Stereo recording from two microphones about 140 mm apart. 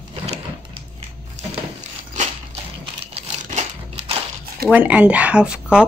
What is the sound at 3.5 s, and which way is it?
Crumpling, 50° right (ahead or behind).